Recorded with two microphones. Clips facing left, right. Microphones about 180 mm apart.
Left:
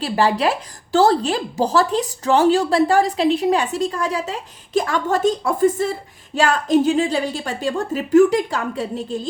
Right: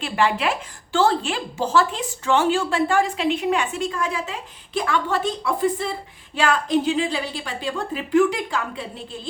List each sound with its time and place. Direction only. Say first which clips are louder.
0.0 s a woman's voice: left 4 dB; 35° left (ahead or behind)